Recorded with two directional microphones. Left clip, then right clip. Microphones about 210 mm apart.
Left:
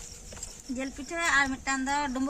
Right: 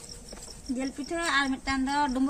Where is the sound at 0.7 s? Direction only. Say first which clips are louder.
Right 1 dB; 5° right (ahead or behind).